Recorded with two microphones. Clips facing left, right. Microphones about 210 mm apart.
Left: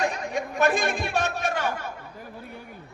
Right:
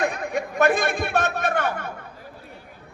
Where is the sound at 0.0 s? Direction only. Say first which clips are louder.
Right 2 dB; 55° right (ahead or behind).